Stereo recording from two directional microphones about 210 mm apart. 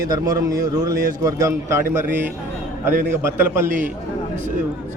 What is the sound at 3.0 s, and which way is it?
Speech, 10° right (ahead or behind).